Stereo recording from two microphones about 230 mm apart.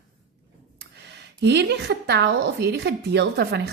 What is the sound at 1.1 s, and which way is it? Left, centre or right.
A woman's voice, right.